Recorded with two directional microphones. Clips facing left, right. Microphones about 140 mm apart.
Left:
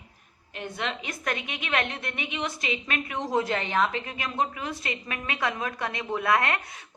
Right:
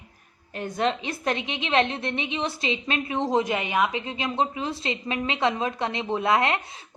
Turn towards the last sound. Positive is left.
turn(degrees=-25)  # may be behind; listen again after turning